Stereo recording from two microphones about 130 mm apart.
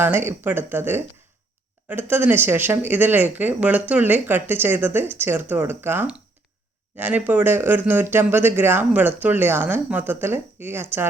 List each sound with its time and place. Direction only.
0.0 s speech: 15° right (ahead or behind)